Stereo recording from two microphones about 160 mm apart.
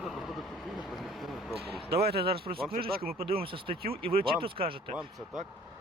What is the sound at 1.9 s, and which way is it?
Speech, 85° right.